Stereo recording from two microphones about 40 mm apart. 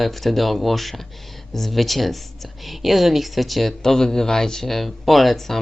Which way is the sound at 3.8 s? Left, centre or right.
Centre.